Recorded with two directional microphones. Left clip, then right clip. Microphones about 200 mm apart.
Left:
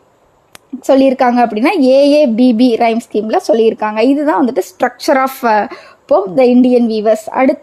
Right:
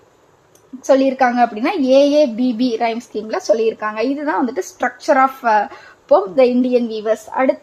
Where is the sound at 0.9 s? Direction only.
45° left (ahead or behind).